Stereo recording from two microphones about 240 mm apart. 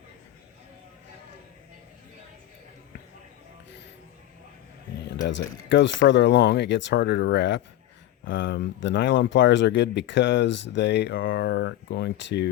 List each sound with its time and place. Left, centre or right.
5.2 s speech: left